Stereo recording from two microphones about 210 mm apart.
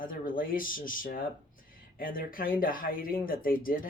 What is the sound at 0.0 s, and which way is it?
Speech, 40° left (ahead or behind).